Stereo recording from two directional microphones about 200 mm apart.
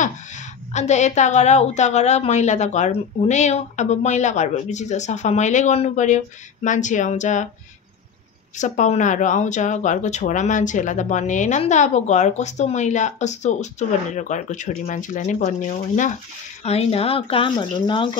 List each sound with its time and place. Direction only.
0.0 s speech: 35° left (ahead or behind)
8.5 s speech: 35° left (ahead or behind)